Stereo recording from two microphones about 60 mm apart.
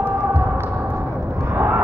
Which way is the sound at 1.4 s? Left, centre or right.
Right.